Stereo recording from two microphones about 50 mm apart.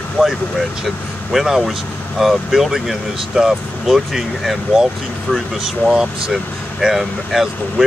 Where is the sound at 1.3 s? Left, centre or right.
Centre.